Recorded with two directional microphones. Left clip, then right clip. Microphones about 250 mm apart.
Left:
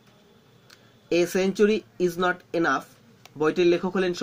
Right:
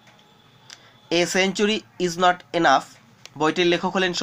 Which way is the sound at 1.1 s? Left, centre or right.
Centre.